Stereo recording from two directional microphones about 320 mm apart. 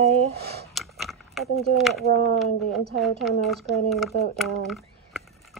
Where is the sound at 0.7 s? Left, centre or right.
Centre.